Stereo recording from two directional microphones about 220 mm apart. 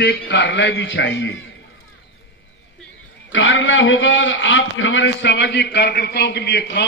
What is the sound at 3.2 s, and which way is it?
A man's voice, 60° left (ahead or behind).